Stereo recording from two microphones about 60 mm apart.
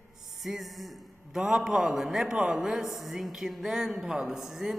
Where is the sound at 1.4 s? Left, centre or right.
Centre.